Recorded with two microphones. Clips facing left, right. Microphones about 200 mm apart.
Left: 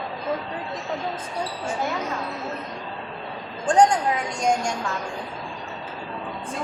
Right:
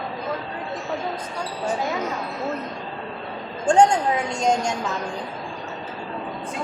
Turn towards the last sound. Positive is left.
turn(degrees=-20)  # may be behind; listen again after turning